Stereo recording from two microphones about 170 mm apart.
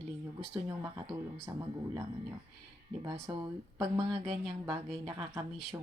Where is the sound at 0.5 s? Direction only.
25° right (ahead or behind).